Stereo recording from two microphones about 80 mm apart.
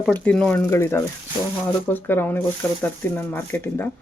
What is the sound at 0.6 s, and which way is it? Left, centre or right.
Speech, left.